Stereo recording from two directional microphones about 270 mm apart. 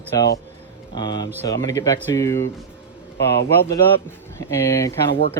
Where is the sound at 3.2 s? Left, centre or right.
Left.